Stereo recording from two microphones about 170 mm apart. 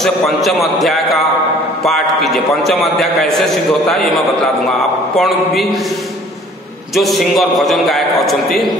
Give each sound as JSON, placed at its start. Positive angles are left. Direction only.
{"t": 0.0, "sound": "a man's voice", "side_deg": 0}
{"t": 7.0, "sound": "a man's voice", "side_deg": 0}